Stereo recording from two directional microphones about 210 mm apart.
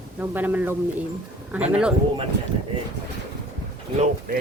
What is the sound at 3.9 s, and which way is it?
Speech, 35° right (ahead or behind).